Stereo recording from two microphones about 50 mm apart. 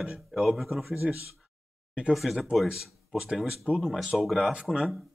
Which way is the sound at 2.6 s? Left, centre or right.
Centre.